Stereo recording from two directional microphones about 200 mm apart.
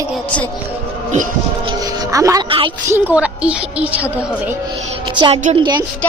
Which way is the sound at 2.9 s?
10° right (ahead or behind).